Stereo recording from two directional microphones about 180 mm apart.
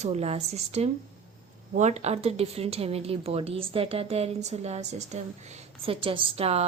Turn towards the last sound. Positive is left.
turn(degrees=-35)  # may be behind; listen again after turning